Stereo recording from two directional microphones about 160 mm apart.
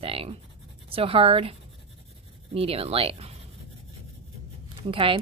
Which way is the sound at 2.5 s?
40° right (ahead or behind).